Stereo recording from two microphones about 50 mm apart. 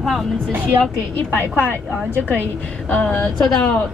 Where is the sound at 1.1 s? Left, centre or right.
Left.